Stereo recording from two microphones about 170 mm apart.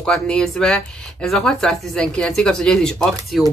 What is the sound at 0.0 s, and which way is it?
Speech, 5° left (ahead or behind).